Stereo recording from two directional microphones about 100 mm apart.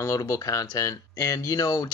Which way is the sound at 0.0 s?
30° left (ahead or behind).